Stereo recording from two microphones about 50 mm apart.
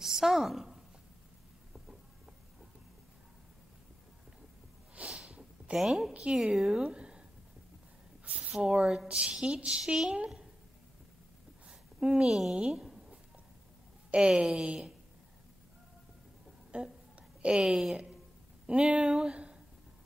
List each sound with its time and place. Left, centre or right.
0.0 s a sound: centre
5.0 s sniff: centre
5.8 s a woman's voice: centre
6.8 s a sound: centre
8.5 s speech: centre
12.0 s speech: centre
12.5 s a sound: centre
14.1 s a woman's voice: centre
16.7 s a woman's voice: right